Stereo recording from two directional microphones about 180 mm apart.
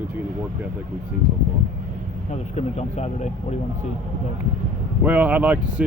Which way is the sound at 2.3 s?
40° left (ahead or behind).